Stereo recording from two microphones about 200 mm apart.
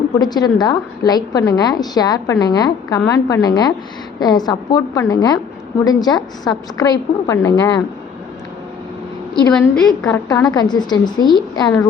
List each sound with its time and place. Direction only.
0.2 s a woman's voice: 20° left (ahead or behind)
9.3 s a woman's voice: 5° left (ahead or behind)
10.2 s a woman's voice: 20° left (ahead or behind)